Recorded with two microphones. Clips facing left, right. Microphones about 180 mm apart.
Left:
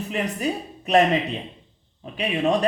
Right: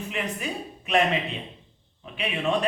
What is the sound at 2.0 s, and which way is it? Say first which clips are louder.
Speech: left 5 dB; 40° left (ahead or behind).